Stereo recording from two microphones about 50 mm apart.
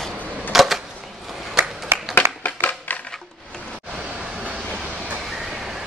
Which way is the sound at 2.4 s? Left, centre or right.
Left.